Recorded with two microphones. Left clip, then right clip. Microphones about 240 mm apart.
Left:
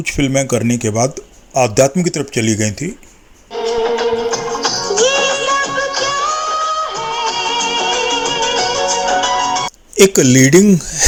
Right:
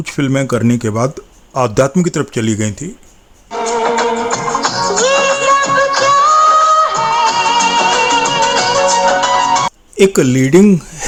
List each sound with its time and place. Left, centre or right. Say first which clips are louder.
0.0 s speech: left 1 dB; centre
3.5 s music: right 2 dB; right
10.0 s speech: left 1 dB; centre